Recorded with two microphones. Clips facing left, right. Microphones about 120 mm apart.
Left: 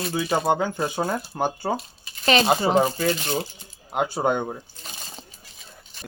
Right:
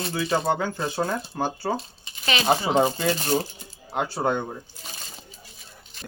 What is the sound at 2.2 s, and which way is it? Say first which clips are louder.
Speech: left 7 dB; 40° left (ahead or behind).